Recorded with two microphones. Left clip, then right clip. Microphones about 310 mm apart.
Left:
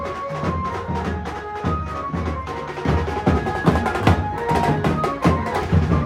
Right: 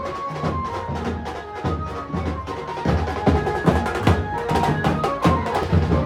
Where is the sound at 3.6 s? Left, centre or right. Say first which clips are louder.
Left 4 dB; centre.